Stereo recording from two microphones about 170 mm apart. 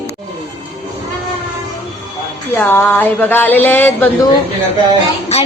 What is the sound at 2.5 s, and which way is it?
Speech, 10° left (ahead or behind).